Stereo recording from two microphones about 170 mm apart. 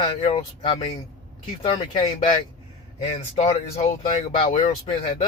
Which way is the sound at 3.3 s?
45° left (ahead or behind).